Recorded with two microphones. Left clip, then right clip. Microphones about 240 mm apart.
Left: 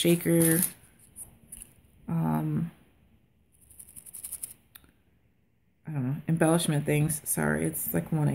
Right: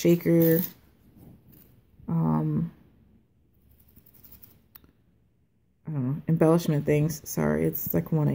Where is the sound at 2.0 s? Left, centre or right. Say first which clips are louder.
Right 2 dB; centre.